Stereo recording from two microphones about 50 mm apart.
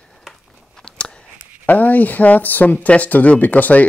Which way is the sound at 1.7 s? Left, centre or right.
Left.